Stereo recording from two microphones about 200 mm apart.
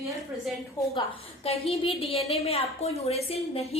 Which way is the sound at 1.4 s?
30° left (ahead or behind).